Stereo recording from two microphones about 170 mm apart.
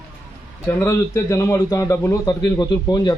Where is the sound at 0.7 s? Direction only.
15° left (ahead or behind).